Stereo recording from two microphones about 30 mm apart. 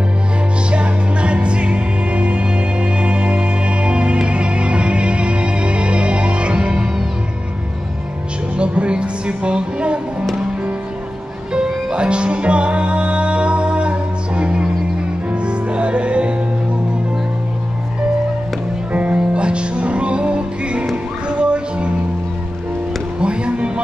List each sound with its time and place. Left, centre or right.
0.7 s music: right
8.5 s music: right
11.5 s music: right
18.9 s music: right
19.1 s music: right
23.2 s music: right